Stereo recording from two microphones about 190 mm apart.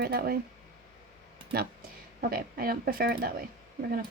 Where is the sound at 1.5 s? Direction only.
55° right (ahead or behind).